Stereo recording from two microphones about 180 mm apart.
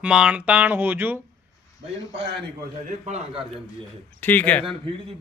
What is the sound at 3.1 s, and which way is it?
Speech, 35° right (ahead or behind).